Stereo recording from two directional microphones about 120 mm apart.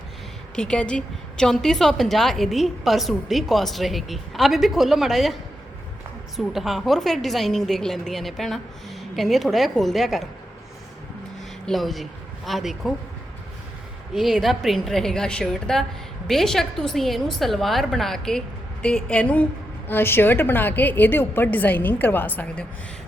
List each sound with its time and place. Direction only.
0.5 s a woman's voice: 5° left (ahead or behind)
11.6 s a woman's voice: centre (ahead or behind)
14.1 s a woman's voice: centre (ahead or behind); by 22.6 s 15° left (ahead or behind)